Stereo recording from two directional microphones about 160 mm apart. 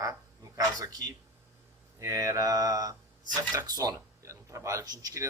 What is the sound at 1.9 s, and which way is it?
Speech, 20° right (ahead or behind).